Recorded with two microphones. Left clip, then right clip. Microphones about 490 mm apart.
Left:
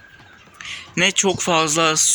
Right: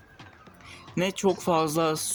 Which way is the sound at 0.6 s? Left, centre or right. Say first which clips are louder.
Left 10 dB; right.